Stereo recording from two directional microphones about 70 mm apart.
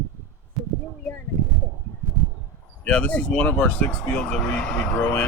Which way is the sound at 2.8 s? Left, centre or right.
Centre.